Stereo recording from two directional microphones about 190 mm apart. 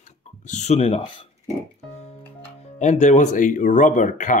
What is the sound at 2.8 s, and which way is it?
Speech, 40° left (ahead or behind).